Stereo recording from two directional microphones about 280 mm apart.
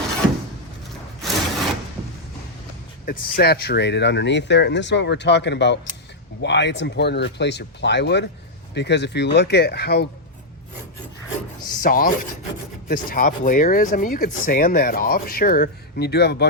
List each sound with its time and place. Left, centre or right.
1.2 s wood: centre
3.1 s speech: left
11.8 s speech: left